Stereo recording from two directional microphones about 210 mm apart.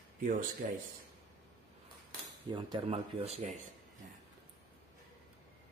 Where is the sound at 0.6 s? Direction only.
40° right (ahead or behind).